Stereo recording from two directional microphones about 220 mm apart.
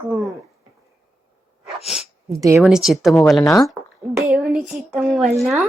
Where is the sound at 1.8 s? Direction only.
Centre (ahead or behind).